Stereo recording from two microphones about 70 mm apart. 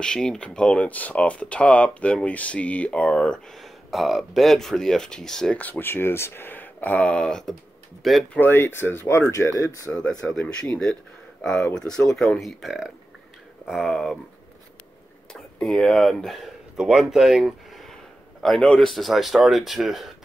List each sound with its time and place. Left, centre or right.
0.0 s speech: centre
3.5 s speech: centre
5.6 s speech: left; by 8.3 s centre
8.3 s speech: left
9.3 s speech: left
10.5 s speech: centre
15.3 s speech: centre
16.7 s speech: centre
18.6 s speech: centre